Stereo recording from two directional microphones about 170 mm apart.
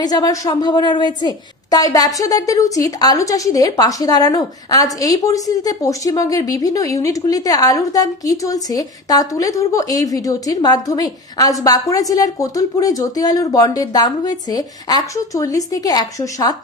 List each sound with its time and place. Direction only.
0.0 s a woman's voice: 20° left (ahead or behind)